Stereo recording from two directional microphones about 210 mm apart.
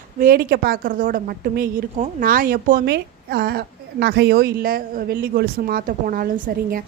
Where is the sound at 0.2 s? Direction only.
45° right (ahead or behind).